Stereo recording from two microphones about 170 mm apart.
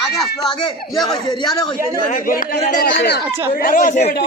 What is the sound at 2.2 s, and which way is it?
A man's voice, 55° left (ahead or behind).